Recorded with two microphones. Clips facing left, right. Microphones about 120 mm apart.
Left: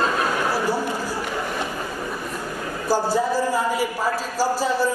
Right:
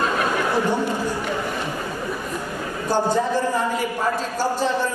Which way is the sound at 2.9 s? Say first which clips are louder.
Even; 5° left (ahead or behind).